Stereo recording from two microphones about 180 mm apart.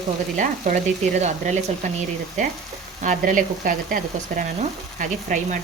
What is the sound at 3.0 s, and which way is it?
Speech, 45° right (ahead or behind).